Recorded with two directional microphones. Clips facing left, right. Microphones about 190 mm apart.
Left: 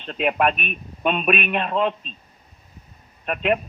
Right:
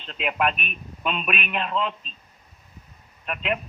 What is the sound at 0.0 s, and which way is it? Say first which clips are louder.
A man's voice: left 5 dB; 50° left (ahead or behind).